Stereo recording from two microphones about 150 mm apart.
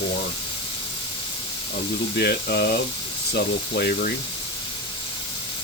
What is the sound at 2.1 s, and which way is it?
Speech, 90° left.